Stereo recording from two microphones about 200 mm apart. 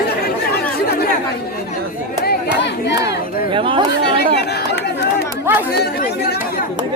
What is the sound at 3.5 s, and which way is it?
Speech, 25° right (ahead or behind).